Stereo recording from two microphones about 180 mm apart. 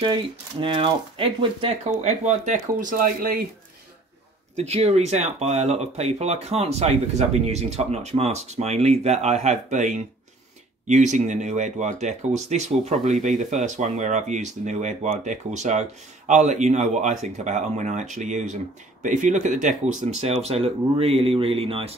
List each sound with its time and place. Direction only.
0.0 s speech: 25° right (ahead or behind)
1.9 s speech: 40° right (ahead or behind)
4.6 s speech: 35° right (ahead or behind)